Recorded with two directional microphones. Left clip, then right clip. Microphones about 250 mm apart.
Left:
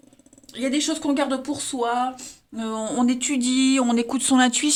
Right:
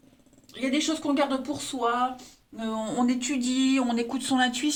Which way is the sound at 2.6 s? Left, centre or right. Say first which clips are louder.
Left 4 dB; left.